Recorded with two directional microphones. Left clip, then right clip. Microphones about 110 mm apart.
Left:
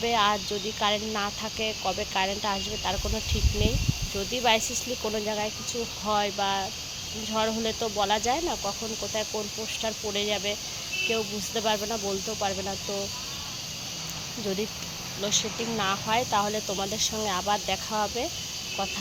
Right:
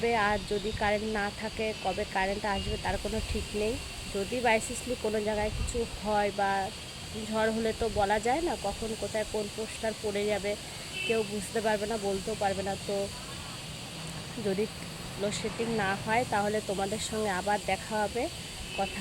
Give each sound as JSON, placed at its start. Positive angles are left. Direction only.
{"t": 0.0, "sound": "speech", "side_deg": -10}
{"t": 5.0, "sound": "speech", "side_deg": -5}
{"t": 9.8, "sound": "speech", "side_deg": -15}
{"t": 15.2, "sound": "speech", "side_deg": -30}
{"t": 15.8, "sound": "speech", "side_deg": -15}